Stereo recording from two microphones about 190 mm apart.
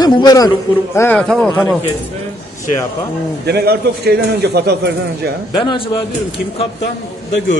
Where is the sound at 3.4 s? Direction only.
55° right (ahead or behind).